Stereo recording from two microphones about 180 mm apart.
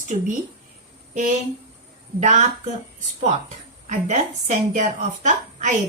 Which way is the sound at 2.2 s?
45° right (ahead or behind).